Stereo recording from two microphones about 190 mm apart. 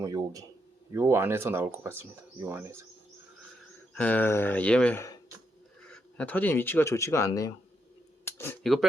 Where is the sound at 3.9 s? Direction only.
10° left (ahead or behind).